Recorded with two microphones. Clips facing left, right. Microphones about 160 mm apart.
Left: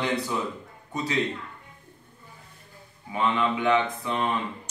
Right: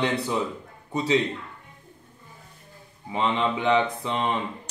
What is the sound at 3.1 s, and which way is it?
Speech, 25° right (ahead or behind).